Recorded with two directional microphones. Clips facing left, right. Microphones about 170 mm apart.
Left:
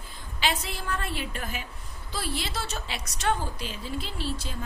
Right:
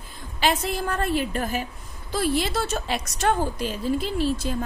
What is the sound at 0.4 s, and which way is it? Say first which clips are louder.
A woman's voice: right 7 dB; 45° right (ahead or behind).